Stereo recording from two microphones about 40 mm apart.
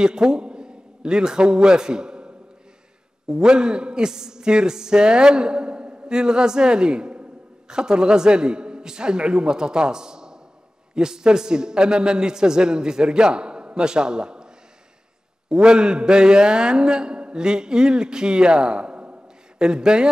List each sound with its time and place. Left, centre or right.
0.0 s a man's voice: centre
15.5 s a man's voice: centre